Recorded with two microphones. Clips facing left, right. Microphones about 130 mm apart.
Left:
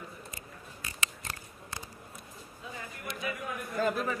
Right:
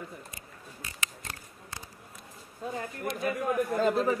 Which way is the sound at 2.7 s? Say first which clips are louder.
Right 7 dB; 45° right (ahead or behind).